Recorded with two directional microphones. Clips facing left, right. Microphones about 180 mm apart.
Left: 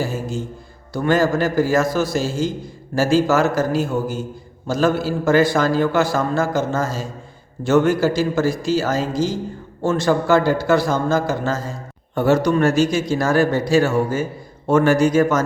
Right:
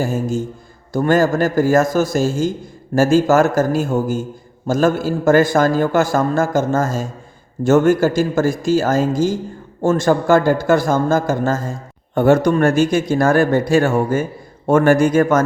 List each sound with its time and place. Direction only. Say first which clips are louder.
0.0 s a man's voice: right 5 dB; 45° right (ahead or behind)